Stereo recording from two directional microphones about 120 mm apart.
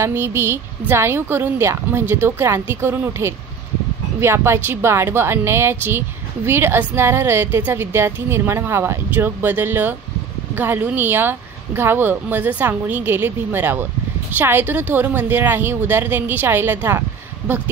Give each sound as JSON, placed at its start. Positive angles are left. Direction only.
{"t": 0.0, "sound": "a woman's voice", "side_deg": -20}